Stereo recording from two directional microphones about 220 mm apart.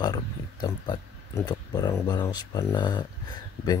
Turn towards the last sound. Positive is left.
turn(degrees=20)  # may be behind; listen again after turning